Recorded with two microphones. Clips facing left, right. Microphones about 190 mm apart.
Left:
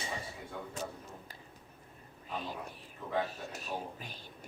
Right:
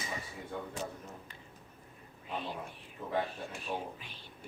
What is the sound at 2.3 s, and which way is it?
Speech, 40° left (ahead or behind).